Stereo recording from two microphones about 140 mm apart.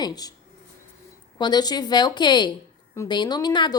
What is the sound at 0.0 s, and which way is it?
Speech, 25° left (ahead or behind).